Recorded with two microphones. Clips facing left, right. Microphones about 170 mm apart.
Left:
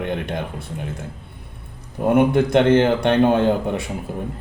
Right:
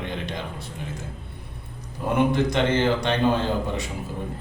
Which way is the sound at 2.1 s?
55° left (ahead or behind).